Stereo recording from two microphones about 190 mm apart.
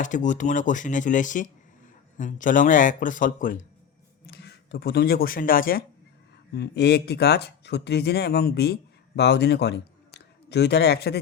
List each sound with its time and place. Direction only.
0.0 s a man's voice: 40° left (ahead or behind)
4.3 s speech: 60° left (ahead or behind)